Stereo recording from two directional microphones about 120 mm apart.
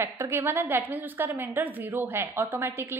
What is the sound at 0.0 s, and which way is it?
A woman's voice, 20° right (ahead or behind).